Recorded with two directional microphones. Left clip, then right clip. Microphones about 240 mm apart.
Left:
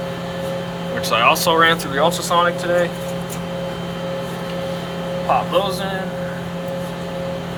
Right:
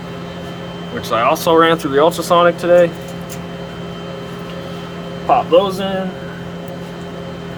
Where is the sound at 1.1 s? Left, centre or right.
Right.